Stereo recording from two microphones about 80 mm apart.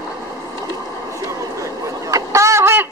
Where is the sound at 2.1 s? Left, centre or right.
Right.